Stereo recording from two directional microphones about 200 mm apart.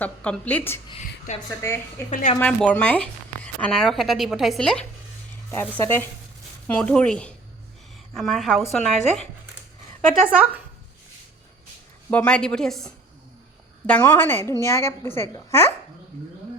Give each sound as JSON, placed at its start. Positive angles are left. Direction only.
{"t": 0.0, "sound": "a woman's voice", "side_deg": 5}
{"t": 1.3, "sound": "speech", "side_deg": 35}
{"t": 2.4, "sound": "a woman's voice", "side_deg": 5}
{"t": 10.2, "sound": "speech", "side_deg": -5}
{"t": 12.1, "sound": "a woman's voice", "side_deg": 5}